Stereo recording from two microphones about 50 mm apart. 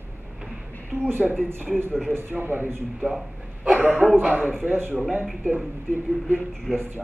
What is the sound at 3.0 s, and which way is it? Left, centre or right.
Speech, centre.